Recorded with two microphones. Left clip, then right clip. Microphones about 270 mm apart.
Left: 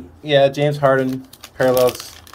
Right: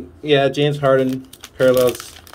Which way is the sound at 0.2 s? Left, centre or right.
Centre.